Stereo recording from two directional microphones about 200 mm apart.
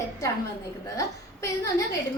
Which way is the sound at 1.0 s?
15° left (ahead or behind).